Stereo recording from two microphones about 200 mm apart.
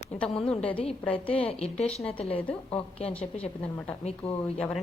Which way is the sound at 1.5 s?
30° left (ahead or behind).